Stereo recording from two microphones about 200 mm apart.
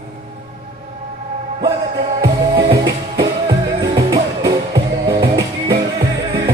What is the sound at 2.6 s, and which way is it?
Music, 20° right (ahead or behind).